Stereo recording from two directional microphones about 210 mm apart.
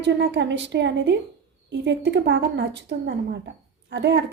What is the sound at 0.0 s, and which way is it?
A woman's voice, 55° right (ahead or behind).